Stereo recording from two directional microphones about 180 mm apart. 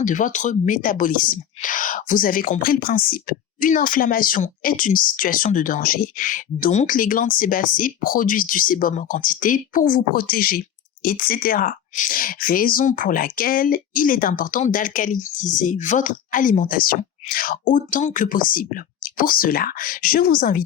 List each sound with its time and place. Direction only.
0.0 s speech: 45° left (ahead or behind)